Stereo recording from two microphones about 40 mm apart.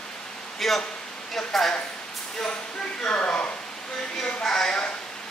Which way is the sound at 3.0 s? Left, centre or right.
Left.